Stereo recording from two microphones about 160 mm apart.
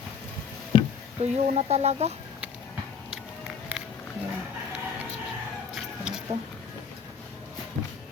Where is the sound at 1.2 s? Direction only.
40° right (ahead or behind).